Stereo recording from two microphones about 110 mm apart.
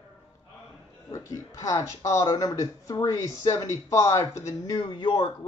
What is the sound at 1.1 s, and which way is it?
Speech, 30° left (ahead or behind).